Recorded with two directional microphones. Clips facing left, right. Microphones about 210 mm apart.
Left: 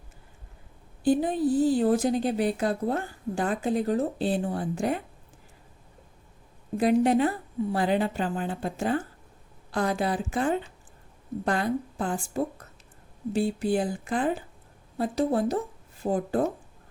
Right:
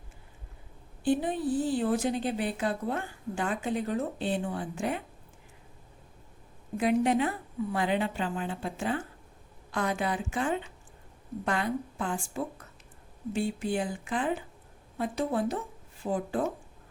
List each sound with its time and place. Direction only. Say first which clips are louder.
1.0 s a woman's voice: left 4 dB; 40° left (ahead or behind)
6.7 s a woman's voice: left 4 dB; 40° left (ahead or behind)